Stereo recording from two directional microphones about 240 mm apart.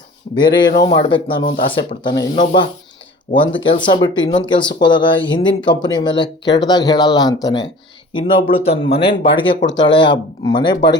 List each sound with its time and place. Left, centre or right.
0.3 s speech: centre
2.3 s speech: left
3.5 s speech: centre
9.6 s speech: left
9.9 s speech: centre